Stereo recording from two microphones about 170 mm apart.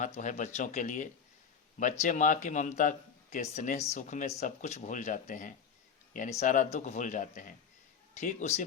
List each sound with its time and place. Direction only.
0.0 s a man's voice: 45° left (ahead or behind)